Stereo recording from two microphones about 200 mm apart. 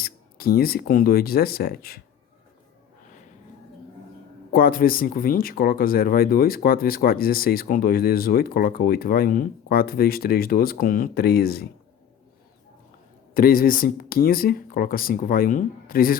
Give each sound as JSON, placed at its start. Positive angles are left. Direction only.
{"t": 0.0, "sound": "speech", "side_deg": 50}
{"t": 4.5, "sound": "speech", "side_deg": 45}
{"t": 13.3, "sound": "speech", "side_deg": 45}